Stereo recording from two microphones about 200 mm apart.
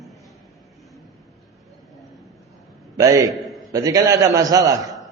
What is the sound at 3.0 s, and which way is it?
Speech, 15° right (ahead or behind).